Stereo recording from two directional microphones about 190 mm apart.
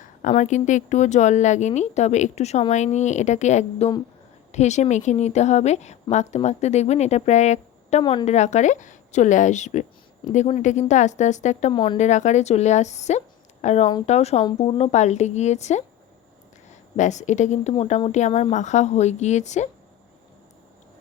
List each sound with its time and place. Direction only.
0.0 s a woman's voice: 40° left (ahead or behind)
11.7 s speech: 25° left (ahead or behind)
11.9 s a woman's voice: 40° left (ahead or behind)
17.0 s a woman's voice: 40° left (ahead or behind)